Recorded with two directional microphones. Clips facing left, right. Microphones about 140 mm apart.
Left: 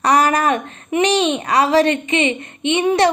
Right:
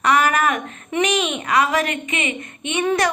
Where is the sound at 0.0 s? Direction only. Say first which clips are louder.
Left 3 dB; 35° left (ahead or behind).